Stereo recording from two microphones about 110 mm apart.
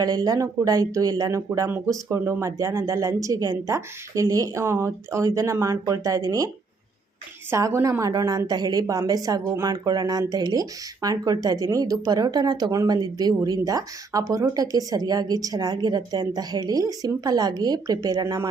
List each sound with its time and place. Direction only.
0.0 s a woman's voice: 35° right (ahead or behind)
7.5 s a woman's voice: 25° right (ahead or behind)